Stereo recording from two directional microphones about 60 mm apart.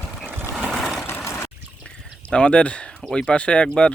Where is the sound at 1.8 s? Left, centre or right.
Centre.